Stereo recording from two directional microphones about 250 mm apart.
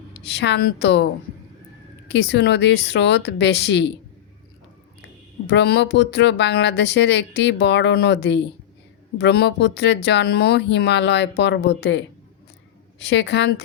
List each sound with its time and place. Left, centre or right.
0.1 s speech: left
2.0 s speech: left
5.5 s speech: left